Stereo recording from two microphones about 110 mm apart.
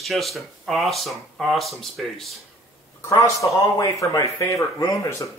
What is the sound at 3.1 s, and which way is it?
Speech, 30° left (ahead or behind).